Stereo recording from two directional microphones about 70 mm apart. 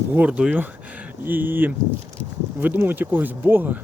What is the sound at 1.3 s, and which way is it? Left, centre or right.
Speech, right.